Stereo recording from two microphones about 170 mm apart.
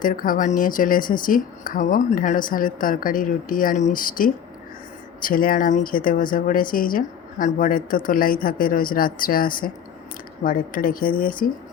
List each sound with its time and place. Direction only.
0.0 s a woman's voice: 55° left (ahead or behind)